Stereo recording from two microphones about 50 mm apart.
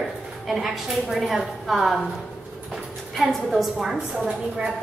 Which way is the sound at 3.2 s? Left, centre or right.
Centre.